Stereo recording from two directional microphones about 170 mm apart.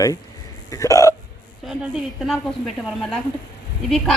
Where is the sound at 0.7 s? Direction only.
20° left (ahead or behind).